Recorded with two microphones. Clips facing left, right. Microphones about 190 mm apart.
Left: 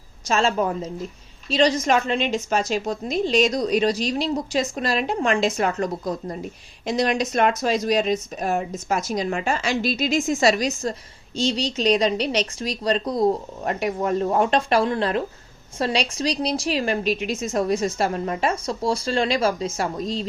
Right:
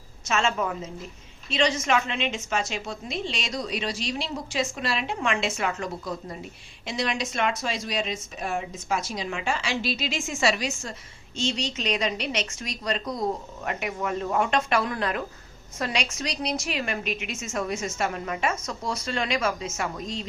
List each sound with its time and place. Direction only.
0.3 s a woman's voice: 35° left (ahead or behind)